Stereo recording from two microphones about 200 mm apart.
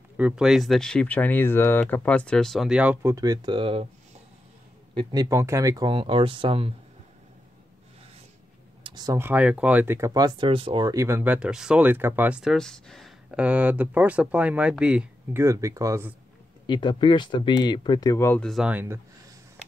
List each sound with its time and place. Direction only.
0.2 s speech: 5° right (ahead or behind); by 3.8 s 25° right (ahead or behind)
4.9 s speech: 20° right (ahead or behind)
8.8 s speech: 20° right (ahead or behind)
16.6 s speech: 25° left (ahead or behind); by 18.9 s 10° right (ahead or behind)